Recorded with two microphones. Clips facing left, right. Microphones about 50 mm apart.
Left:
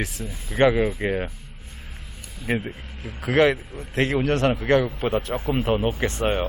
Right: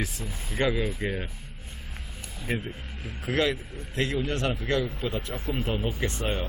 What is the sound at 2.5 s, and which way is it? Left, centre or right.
A man's voice, left.